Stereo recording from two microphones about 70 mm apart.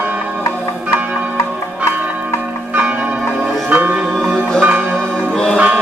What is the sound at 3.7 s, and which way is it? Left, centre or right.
Music, right.